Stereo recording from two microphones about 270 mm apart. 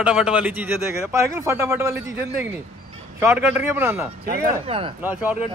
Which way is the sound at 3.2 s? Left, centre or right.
Centre.